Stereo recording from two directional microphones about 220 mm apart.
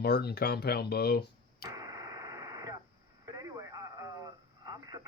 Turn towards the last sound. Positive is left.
turn(degrees=-15)  # may be behind; listen again after turning